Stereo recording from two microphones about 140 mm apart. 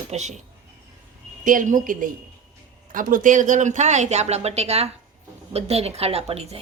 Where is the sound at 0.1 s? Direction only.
55° right (ahead or behind).